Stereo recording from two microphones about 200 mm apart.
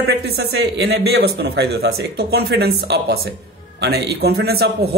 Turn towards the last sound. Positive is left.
turn(degrees=-55)  # may be behind; listen again after turning